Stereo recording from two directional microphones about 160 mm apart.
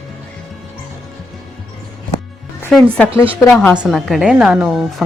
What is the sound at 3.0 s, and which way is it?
Speech, 5° left (ahead or behind).